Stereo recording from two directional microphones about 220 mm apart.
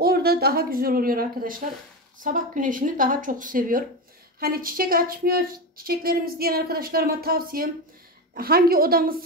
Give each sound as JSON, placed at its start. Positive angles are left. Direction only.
{"t": 0.0, "sound": "speech", "side_deg": -45}